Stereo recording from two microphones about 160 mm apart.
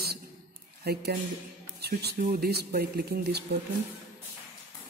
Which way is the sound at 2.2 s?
65° right (ahead or behind).